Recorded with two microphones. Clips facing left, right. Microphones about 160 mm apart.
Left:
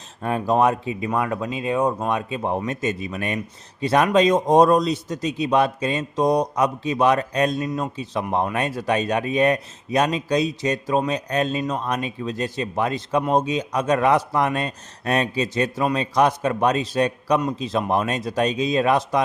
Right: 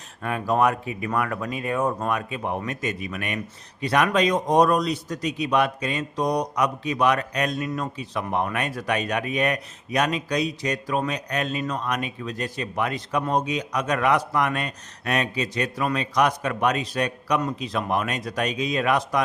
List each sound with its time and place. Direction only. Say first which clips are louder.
0.2 s a man's voice: left 3 dB; 30° left (ahead or behind)